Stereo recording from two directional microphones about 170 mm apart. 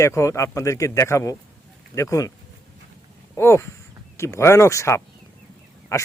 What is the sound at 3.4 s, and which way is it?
Speech, 15° left (ahead or behind).